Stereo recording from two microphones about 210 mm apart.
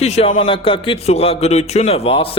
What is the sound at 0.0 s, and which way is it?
A man's voice, 30° left (ahead or behind).